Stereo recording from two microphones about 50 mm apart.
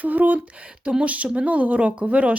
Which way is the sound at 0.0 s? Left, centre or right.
Right.